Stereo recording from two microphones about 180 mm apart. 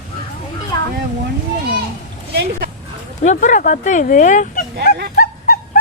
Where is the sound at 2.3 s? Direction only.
60° right (ahead or behind).